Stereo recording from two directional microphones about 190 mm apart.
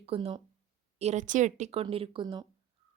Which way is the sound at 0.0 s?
30° right (ahead or behind).